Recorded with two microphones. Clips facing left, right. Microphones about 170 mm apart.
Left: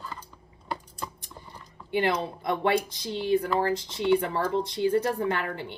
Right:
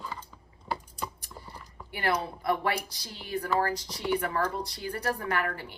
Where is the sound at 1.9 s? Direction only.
20° left (ahead or behind).